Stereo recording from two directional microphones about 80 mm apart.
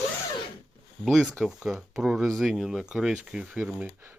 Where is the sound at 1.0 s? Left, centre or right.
Centre.